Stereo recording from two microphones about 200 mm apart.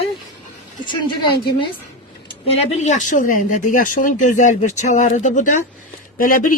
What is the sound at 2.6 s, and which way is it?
A woman's voice, 35° left (ahead or behind).